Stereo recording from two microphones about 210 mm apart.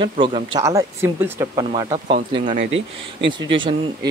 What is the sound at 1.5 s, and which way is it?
Speech, 20° right (ahead or behind).